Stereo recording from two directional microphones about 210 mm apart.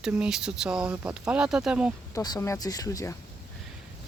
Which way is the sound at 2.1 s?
15° left (ahead or behind).